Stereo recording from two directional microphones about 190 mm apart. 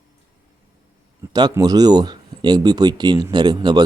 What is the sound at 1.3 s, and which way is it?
Speech, 20° right (ahead or behind).